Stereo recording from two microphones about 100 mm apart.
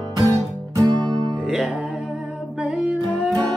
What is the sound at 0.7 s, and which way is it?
Music, 40° right (ahead or behind).